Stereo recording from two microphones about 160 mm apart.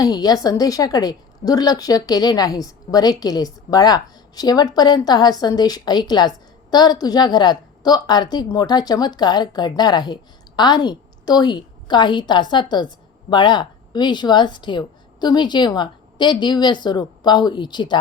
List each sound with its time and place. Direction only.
0.0 s a woman's voice: 25° left (ahead or behind)